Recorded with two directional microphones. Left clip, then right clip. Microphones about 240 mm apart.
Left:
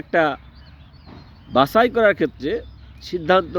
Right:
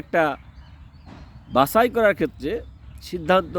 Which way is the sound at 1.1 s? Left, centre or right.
Right.